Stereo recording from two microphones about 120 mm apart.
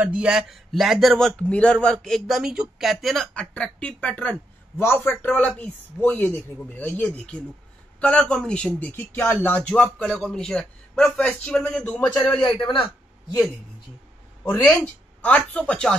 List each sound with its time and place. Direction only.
0.0 s a man's voice: 10° right (ahead or behind); by 12.2 s 10° left (ahead or behind)
12.5 s a man's voice: 45° left (ahead or behind)
14.7 s a man's voice: 10° left (ahead or behind)